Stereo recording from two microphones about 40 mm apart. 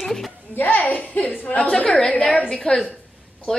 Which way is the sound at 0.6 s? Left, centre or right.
Left.